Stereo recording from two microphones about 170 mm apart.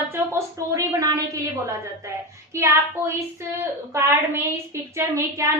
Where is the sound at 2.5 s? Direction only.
15° right (ahead or behind).